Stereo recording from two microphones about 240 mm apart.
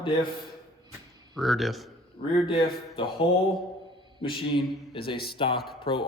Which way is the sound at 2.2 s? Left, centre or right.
Left.